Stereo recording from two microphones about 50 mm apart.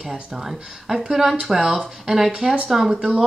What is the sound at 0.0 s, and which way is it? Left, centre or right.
Speech, centre.